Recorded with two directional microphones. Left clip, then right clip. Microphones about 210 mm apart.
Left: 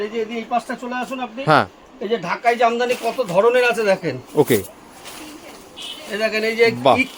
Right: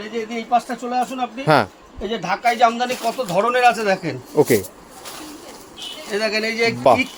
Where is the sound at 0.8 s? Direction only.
5° left (ahead or behind); by 4.2 s 25° left (ahead or behind).